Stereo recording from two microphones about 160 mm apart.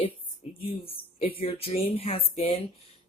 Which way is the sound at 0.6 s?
35° left (ahead or behind).